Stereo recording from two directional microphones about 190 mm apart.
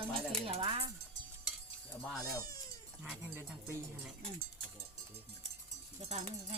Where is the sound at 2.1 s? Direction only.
20° left (ahead or behind).